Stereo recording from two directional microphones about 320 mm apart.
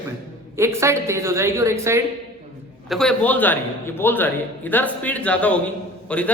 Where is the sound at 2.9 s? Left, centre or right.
Centre.